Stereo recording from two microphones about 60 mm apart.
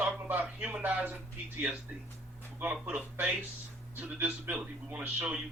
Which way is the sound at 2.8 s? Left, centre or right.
Right.